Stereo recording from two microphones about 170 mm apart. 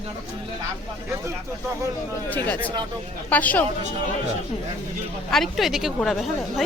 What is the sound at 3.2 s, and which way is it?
Speech, 10° left (ahead or behind).